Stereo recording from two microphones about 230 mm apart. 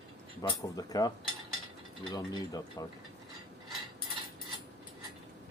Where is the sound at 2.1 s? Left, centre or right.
Centre.